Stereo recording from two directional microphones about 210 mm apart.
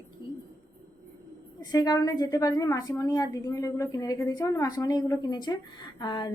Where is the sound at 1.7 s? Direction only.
20° left (ahead or behind).